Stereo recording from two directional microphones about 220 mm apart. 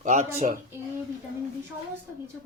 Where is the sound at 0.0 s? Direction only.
35° right (ahead or behind).